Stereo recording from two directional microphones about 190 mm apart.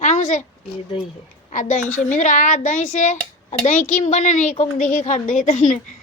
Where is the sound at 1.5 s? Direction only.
40° left (ahead or behind).